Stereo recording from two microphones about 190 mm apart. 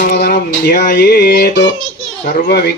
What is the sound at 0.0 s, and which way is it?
Mantra, 55° left (ahead or behind).